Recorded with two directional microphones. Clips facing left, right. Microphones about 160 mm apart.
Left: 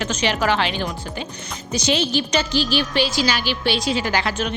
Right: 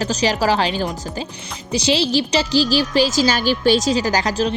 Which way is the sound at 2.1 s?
35° right (ahead or behind).